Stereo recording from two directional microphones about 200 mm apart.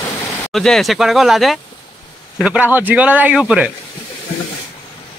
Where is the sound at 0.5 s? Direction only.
Centre (ahead or behind).